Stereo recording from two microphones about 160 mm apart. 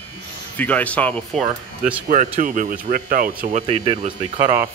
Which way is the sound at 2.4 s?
55° right (ahead or behind).